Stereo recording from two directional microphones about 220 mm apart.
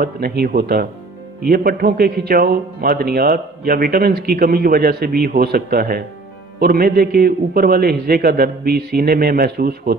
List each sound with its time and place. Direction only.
0.0 s a man's voice: 45° right (ahead or behind)